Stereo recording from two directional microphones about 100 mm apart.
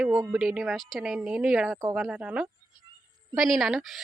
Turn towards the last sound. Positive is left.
turn(degrees=0)  # may be behind; listen again after turning